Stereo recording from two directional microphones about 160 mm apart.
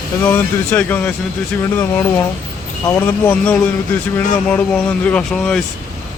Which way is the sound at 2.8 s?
15° left (ahead or behind).